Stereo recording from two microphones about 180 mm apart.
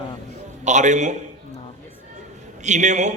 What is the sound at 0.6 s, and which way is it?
Speech, 40° right (ahead or behind).